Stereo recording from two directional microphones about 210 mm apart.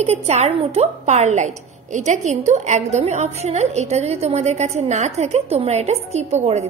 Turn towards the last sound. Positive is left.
turn(degrees=-30)  # may be behind; listen again after turning